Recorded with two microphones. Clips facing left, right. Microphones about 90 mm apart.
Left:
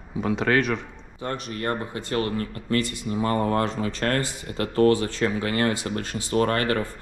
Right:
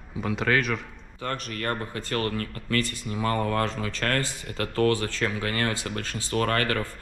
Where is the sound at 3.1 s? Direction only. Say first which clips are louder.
Left 4 dB; 35° left (ahead or behind).